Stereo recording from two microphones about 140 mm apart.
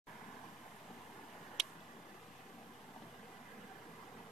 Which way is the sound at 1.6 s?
Centre (ahead or behind).